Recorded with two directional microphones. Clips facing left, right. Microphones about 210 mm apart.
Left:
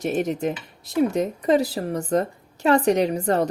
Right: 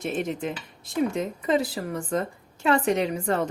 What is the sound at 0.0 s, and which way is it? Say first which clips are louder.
Speech: left 5 dB; 40° left (ahead or behind).